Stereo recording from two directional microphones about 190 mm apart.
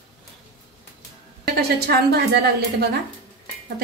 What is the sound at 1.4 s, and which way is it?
A woman's voice, 55° right (ahead or behind).